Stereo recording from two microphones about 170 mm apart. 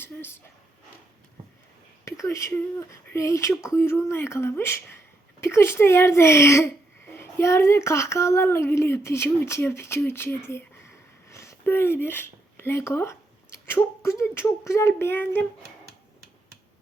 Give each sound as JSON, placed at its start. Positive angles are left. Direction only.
{"t": 0.0, "sound": "speech", "side_deg": 15}
{"t": 2.0, "sound": "speech", "side_deg": 15}